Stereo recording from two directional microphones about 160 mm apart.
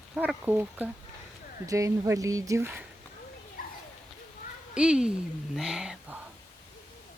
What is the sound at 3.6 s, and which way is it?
Children playing, 65° left (ahead or behind).